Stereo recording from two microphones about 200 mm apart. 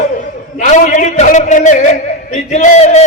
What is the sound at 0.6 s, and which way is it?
A man's voice, 35° left (ahead or behind).